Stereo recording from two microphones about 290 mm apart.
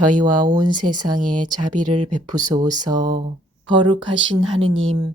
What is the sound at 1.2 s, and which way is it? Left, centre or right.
Speech, right.